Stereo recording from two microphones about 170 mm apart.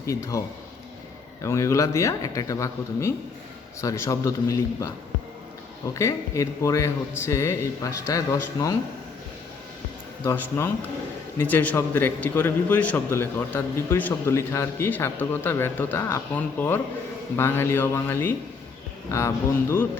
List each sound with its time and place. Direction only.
0.0 s a man's voice: 20° left (ahead or behind)
5.9 s a man's voice: 20° left (ahead or behind)
10.2 s a man's voice: 15° left (ahead or behind)